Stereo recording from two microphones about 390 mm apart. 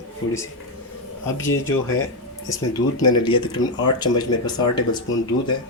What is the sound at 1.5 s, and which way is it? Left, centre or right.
Speech, left.